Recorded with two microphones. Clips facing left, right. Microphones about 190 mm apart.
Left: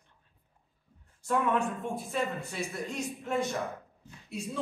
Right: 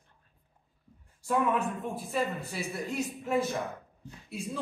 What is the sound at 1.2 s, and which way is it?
A man's voice, 5° right (ahead or behind).